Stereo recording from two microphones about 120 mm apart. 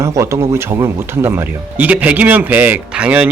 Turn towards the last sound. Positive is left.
turn(degrees=-15)  # may be behind; listen again after turning